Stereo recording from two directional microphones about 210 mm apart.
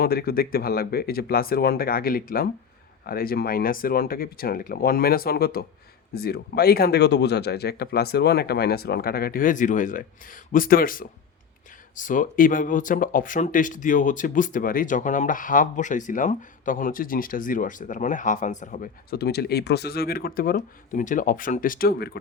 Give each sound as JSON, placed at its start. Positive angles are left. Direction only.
{"t": 0.0, "sound": "speech", "side_deg": 45}